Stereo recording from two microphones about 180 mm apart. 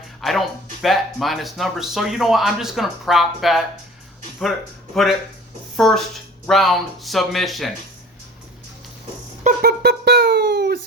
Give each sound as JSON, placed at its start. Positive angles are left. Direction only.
{"t": 0.2, "sound": "speech", "side_deg": 0}
{"t": 5.7, "sound": "speech", "side_deg": 0}
{"t": 9.4, "sound": "a sound", "side_deg": -50}